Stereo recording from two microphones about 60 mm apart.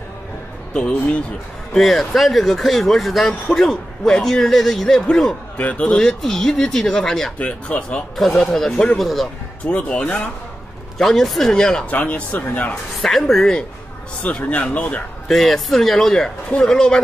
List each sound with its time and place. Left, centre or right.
0.7 s speech: centre
1.7 s speech: centre
5.6 s speech: left
7.3 s speech: left
8.2 s speech: centre
9.7 s speech: left
11.0 s speech: centre
11.9 s speech: left
13.0 s speech: centre
14.2 s speech: left
15.2 s speech: centre